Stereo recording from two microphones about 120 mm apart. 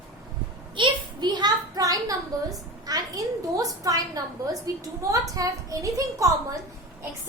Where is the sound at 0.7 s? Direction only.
40° right (ahead or behind).